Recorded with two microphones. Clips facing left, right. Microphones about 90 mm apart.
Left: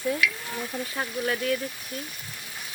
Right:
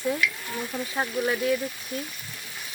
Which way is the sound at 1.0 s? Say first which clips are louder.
Right 3 dB; 15° right (ahead or behind).